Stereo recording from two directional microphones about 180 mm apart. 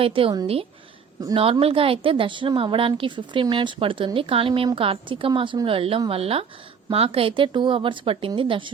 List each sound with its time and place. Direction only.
0.0 s a woman's voice: 30° right (ahead or behind)